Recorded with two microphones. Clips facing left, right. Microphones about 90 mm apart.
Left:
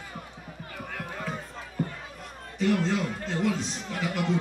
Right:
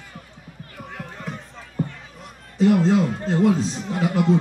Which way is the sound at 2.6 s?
30° right (ahead or behind).